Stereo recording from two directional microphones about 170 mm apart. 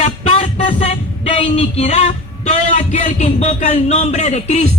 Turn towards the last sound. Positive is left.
turn(degrees=40)  # may be behind; listen again after turning